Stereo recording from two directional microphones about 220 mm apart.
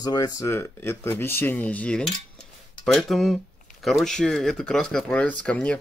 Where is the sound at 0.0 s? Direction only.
20° left (ahead or behind).